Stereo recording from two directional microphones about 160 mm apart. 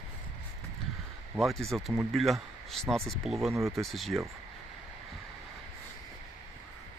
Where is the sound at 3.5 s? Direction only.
20° right (ahead or behind).